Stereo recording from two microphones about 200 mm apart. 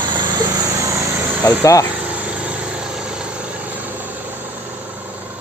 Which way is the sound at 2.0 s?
5° right (ahead or behind).